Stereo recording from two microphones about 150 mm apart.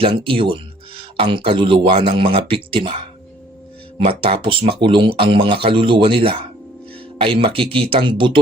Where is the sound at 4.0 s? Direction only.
40° right (ahead or behind).